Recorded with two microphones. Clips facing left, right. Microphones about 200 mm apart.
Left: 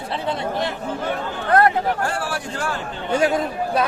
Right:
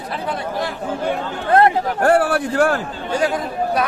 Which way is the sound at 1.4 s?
25° right (ahead or behind).